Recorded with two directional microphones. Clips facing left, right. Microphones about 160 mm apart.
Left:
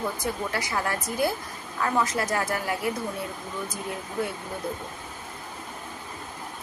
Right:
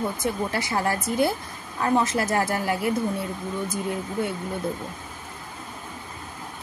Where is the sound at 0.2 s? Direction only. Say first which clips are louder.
Right 3 dB; 25° right (ahead or behind).